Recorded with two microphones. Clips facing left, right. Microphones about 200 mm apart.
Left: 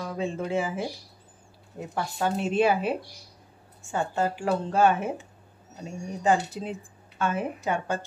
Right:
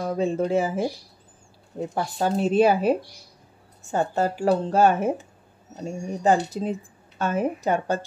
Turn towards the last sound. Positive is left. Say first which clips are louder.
# right 5 dB
turn(degrees=-40)  # may be behind; listen again after turning